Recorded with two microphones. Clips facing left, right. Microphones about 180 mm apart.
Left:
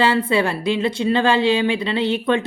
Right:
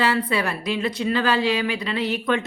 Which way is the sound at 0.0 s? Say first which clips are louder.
Left 4 dB; 25° left (ahead or behind).